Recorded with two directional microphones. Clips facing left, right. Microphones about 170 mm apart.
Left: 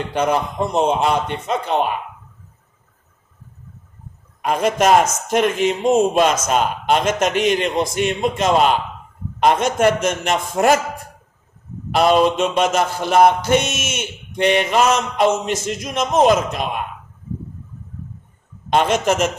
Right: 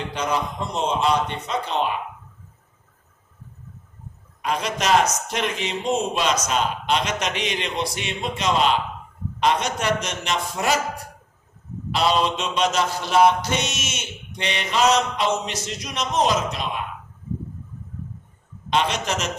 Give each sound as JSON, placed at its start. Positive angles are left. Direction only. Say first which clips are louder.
{"t": 0.1, "sound": "mantra", "louder": "left 7 dB", "side_deg": 55}
{"t": 4.4, "sound": "mantra", "louder": "left 7 dB", "side_deg": 50}
{"t": 11.9, "sound": "mantra", "louder": "left 7 dB", "side_deg": 50}
{"t": 18.7, "sound": "mantra", "louder": "left 6 dB", "side_deg": 50}